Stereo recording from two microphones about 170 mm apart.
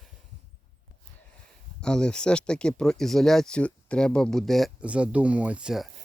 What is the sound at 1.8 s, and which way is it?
Speech, 5° left (ahead or behind).